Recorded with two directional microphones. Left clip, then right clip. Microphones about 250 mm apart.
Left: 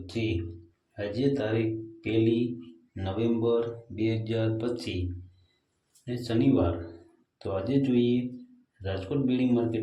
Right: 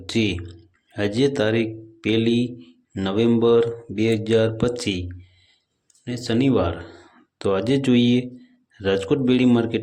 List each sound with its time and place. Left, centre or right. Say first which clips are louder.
0.9 s speech: right 8 dB; right
6.1 s speech: right 5 dB; right